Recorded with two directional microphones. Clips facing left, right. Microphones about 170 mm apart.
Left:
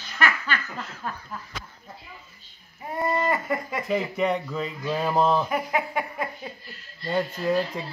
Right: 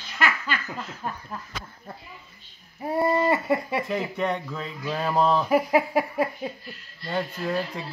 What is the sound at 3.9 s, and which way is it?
Speech, 5° left (ahead or behind).